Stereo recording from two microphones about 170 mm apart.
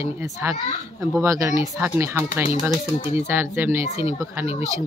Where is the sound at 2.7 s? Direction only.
30° left (ahead or behind).